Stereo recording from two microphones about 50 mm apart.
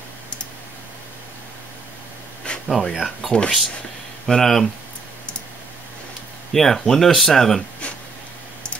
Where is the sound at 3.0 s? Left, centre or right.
Centre.